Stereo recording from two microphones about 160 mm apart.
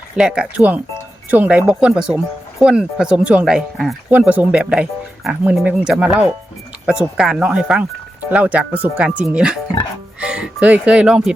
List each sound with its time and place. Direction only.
0.2 s speech: 5° right (ahead or behind)